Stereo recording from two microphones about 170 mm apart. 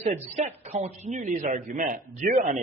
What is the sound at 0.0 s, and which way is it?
A man's voice, 40° right (ahead or behind).